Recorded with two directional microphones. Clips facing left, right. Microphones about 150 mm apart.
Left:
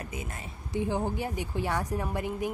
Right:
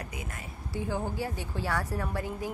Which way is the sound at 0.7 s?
20° left (ahead or behind).